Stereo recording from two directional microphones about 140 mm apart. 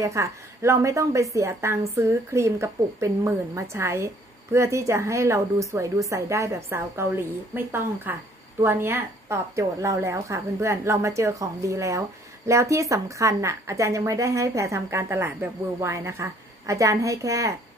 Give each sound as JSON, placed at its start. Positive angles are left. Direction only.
{"t": 0.0, "sound": "a woman's voice", "side_deg": -20}